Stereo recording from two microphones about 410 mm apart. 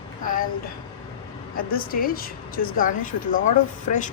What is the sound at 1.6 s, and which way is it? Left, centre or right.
A woman's voice, left.